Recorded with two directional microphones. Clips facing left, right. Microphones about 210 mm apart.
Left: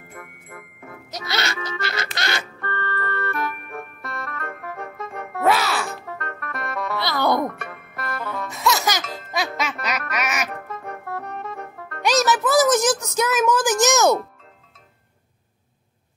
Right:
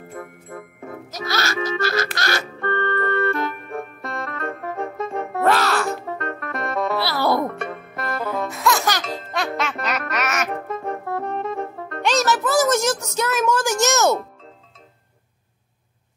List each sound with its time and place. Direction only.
0.1 s music: 30° right (ahead or behind)
1.3 s music: 20° left (ahead or behind)
2.6 s music: 20° right (ahead or behind)
5.4 s music: centre (ahead or behind)
6.0 s music: 25° right (ahead or behind)
7.0 s music: 5° right (ahead or behind)
7.4 s music: 25° right (ahead or behind)
8.5 s music: centre (ahead or behind)
10.5 s music: 25° right (ahead or behind)
12.3 s music: 15° left (ahead or behind)